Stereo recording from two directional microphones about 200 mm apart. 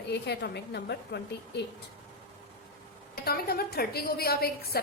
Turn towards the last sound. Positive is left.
turn(degrees=50)  # may be behind; listen again after turning